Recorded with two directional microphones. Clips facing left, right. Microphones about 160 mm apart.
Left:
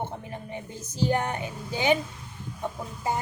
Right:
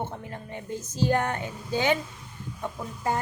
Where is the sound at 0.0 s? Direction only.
15° left (ahead or behind).